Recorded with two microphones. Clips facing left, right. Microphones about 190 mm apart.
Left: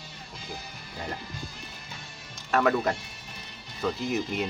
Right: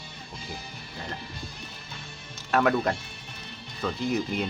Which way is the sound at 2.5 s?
Centre (ahead or behind).